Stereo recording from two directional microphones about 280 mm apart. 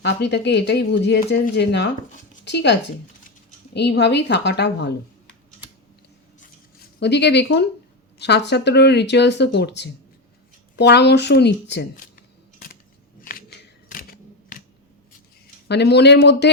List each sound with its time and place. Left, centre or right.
0.0 s speech: left
3.8 s speech: left
7.0 s speech: left
13.9 s camera: left
15.6 s speech: left